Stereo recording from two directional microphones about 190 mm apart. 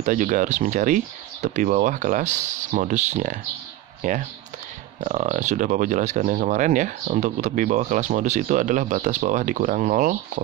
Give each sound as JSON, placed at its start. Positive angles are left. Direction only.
{"t": 0.0, "sound": "speech", "side_deg": -45}